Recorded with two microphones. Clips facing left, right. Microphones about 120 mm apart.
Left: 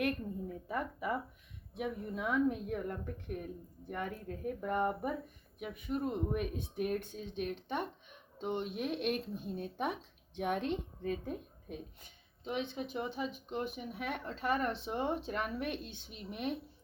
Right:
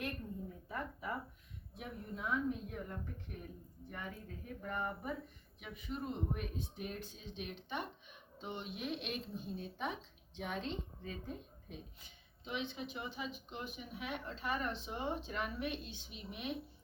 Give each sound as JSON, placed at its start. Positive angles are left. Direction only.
{"t": 0.0, "sound": "a woman's voice", "side_deg": 80}